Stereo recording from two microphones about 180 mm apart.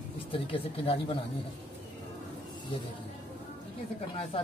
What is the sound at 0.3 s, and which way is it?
Speech, 30° left (ahead or behind).